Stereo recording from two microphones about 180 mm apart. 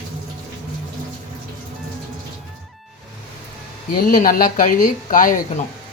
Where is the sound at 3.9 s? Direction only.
50° left (ahead or behind).